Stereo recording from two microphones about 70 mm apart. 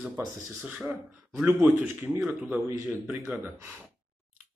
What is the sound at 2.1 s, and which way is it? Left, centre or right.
Speech, centre.